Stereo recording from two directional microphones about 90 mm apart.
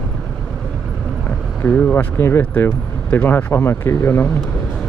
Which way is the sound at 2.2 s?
25° left (ahead or behind).